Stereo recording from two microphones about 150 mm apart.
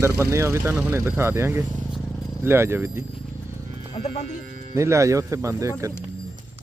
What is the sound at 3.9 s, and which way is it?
Music, 35° left (ahead or behind).